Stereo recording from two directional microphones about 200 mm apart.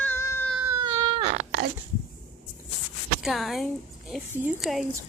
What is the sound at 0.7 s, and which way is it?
Baby cry, 20° right (ahead or behind).